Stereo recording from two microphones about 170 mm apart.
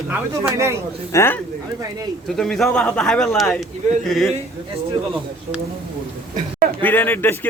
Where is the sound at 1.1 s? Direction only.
15° left (ahead or behind).